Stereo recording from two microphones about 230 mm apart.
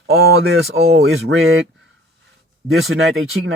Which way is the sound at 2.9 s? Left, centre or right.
Right.